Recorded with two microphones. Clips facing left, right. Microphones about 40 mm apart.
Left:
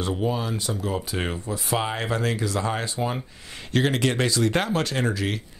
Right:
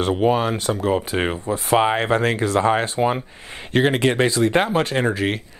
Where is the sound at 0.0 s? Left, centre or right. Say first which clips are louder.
Right 8 dB; right.